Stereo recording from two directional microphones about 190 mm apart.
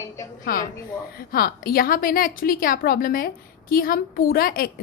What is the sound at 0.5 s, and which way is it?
A woman's voice, 50° left (ahead or behind).